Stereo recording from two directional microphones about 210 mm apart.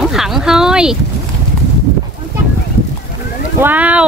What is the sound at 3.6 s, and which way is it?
Speech, 10° right (ahead or behind).